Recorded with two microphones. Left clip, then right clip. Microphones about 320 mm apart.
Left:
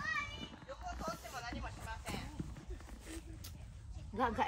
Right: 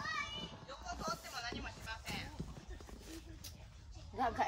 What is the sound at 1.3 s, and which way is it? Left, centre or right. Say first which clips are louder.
Music: right 1 dB; centre.